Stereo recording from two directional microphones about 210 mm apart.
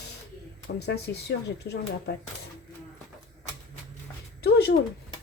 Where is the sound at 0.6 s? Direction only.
55° left (ahead or behind).